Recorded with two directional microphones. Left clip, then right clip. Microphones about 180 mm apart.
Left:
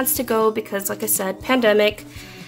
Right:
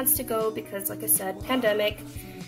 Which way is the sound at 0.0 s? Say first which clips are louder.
Left 8 dB; 45° left (ahead or behind).